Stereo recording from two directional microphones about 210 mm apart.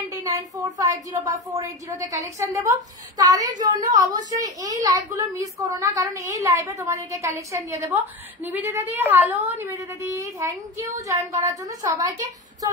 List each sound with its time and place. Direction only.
0.1 s a woman's voice: 15° right (ahead or behind)
3.4 s a woman's voice: 40° right (ahead or behind)
3.9 s a woman's voice: 15° right (ahead or behind)